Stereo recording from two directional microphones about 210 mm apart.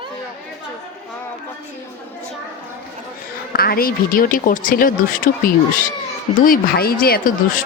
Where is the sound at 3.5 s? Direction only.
45° left (ahead or behind).